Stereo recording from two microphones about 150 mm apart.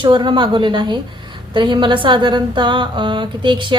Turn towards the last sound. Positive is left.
turn(degrees=-30)  # may be behind; listen again after turning